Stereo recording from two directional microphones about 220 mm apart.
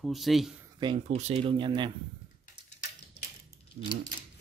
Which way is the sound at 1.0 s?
30° right (ahead or behind).